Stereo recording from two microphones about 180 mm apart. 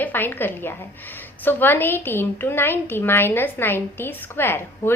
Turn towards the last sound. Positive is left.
turn(degrees=10)  # may be behind; listen again after turning